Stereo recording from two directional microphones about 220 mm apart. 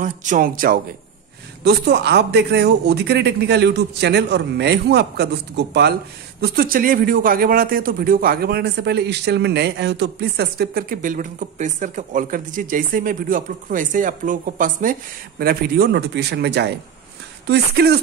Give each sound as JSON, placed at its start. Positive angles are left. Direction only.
{"t": 0.0, "sound": "speech", "side_deg": -35}